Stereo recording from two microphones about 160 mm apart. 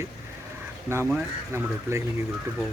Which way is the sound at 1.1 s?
15° right (ahead or behind).